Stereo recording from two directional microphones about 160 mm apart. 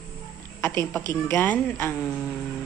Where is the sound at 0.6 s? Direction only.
15° left (ahead or behind).